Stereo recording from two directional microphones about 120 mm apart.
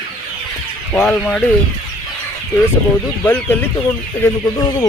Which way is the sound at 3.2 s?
15° left (ahead or behind).